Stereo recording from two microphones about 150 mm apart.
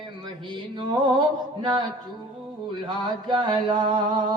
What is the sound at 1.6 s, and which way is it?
Music, 30° right (ahead or behind).